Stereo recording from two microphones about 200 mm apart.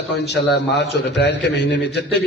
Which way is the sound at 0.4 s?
55° left (ahead or behind).